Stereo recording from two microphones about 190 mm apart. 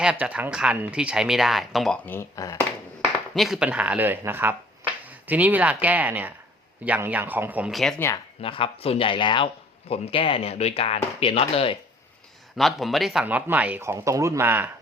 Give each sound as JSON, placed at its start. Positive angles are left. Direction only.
{"t": 0.0, "sound": "speech", "side_deg": -5}
{"t": 3.3, "sound": "speech", "side_deg": 0}
{"t": 7.9, "sound": "speech", "side_deg": 15}
{"t": 8.4, "sound": "speech", "side_deg": 30}
{"t": 12.5, "sound": "speech", "side_deg": 0}